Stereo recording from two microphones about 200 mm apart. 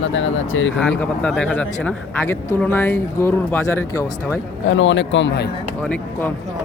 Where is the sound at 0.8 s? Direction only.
5° left (ahead or behind).